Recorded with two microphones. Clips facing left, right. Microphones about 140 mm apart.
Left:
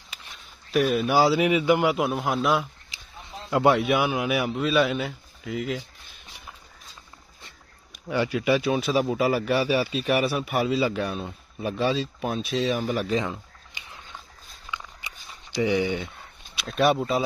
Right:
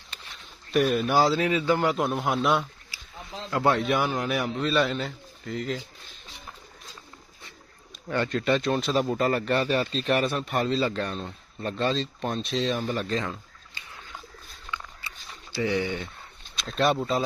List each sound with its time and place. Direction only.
0.7 s speech: centre (ahead or behind)
2.9 s a sound: 20° left (ahead or behind)
3.4 s speech: 15° left (ahead or behind)
8.1 s speech: 10° left (ahead or behind)
14.7 s a sound: 15° left (ahead or behind)
15.5 s speech: 15° left (ahead or behind)